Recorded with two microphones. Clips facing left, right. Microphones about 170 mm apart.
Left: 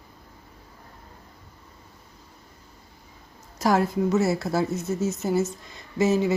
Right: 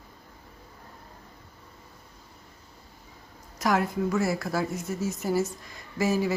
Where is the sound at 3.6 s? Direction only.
30° left (ahead or behind).